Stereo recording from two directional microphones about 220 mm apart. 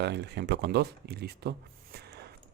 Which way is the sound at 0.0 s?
50° right (ahead or behind).